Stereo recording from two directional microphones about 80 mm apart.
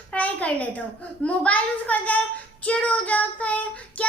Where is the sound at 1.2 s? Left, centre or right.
Centre.